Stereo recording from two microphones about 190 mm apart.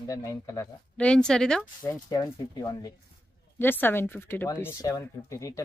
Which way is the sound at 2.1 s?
15° left (ahead or behind).